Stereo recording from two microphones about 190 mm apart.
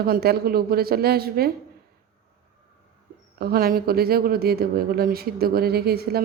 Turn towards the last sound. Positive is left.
turn(degrees=-55)  # may be behind; listen again after turning